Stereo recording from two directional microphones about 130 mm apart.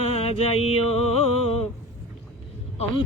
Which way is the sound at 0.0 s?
50° left (ahead or behind).